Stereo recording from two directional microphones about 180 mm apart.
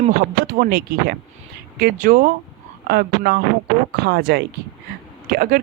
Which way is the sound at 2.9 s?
60° right (ahead or behind).